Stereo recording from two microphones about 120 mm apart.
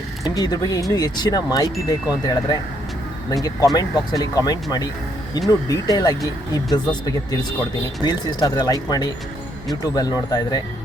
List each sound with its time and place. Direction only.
0.3 s speech: 35° left (ahead or behind)
3.8 s speech: 35° left (ahead or behind)
8.0 s speech: 35° left (ahead or behind)